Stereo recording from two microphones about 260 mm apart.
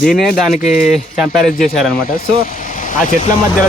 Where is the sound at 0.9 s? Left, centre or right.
Centre.